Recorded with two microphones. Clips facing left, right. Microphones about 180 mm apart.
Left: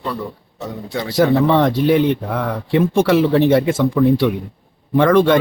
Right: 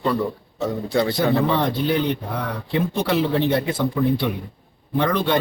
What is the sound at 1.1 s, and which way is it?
Speech, 90° left.